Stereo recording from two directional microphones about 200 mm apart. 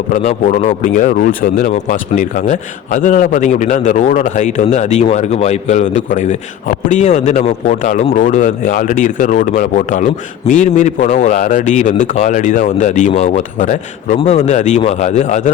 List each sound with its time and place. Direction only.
0.1 s speech: 40° left (ahead or behind)